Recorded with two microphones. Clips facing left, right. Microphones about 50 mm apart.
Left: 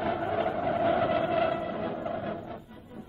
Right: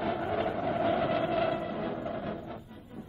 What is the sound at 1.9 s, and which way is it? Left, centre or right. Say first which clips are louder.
Music: left 2 dB; centre.